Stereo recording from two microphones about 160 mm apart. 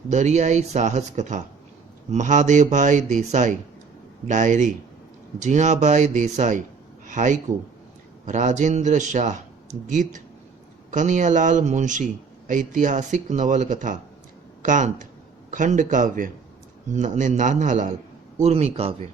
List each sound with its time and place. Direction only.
0.1 s a man's voice: 45° right (ahead or behind)